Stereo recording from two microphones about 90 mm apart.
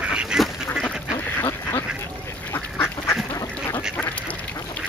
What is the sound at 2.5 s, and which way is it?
Duck, 25° left (ahead or behind).